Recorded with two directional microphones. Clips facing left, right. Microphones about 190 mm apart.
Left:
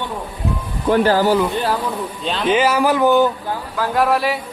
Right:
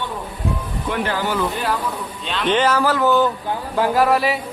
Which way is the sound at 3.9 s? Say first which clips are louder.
Left 1 dB; centre (ahead or behind).